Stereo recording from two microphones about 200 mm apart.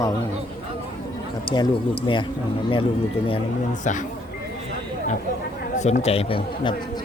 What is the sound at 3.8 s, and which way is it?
Speech, 40° left (ahead or behind).